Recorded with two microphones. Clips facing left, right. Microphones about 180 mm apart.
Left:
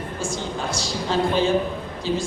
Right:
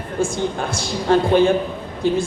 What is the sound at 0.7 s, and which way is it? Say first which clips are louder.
Speech: right 7 dB; 55° right (ahead or behind).